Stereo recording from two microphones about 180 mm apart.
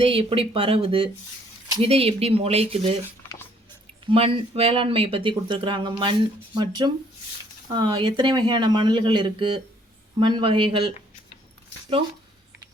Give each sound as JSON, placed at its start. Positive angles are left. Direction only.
{"t": 0.0, "sound": "speech", "side_deg": -30}
{"t": 4.0, "sound": "speech", "side_deg": -30}